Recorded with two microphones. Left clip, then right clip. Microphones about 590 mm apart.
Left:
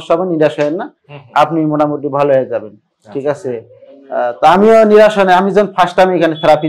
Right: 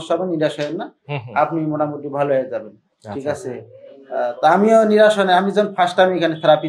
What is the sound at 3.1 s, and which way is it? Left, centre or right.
Speech, right.